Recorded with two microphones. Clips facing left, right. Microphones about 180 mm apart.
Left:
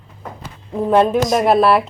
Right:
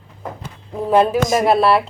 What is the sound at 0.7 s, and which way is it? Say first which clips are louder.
A woman's voice: left 1 dB; centre (ahead or behind).